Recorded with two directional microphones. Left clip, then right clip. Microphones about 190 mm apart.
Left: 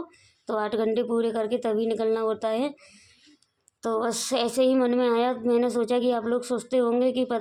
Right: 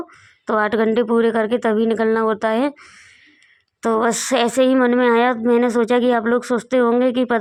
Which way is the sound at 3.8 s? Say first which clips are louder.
Right 9 dB; 30° right (ahead or behind).